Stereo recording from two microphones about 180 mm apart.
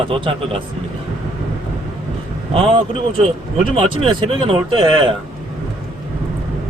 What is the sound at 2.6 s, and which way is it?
Speech, 30° right (ahead or behind).